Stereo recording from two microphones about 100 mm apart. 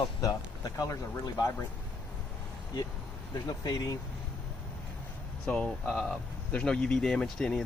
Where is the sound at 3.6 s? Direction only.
35° left (ahead or behind).